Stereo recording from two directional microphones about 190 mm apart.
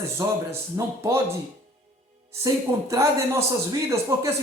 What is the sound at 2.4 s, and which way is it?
Speech, 15° right (ahead or behind).